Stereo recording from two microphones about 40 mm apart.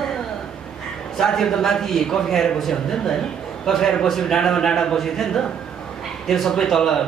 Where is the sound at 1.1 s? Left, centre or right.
Centre.